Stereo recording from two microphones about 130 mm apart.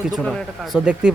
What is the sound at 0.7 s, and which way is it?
Speech, 10° right (ahead or behind).